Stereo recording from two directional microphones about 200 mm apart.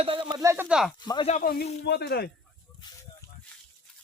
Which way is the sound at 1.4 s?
50° left (ahead or behind).